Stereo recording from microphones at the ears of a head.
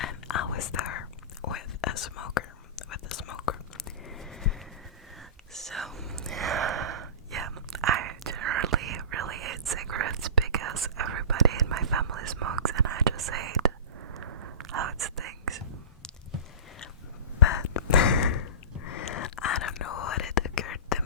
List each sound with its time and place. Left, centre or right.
0.0 s whispering: left
6.3 s whispering: right
17.6 s a sound: left